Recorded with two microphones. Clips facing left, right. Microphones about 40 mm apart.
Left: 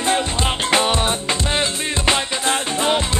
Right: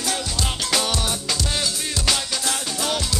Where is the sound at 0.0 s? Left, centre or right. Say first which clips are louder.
Left 7 dB; left.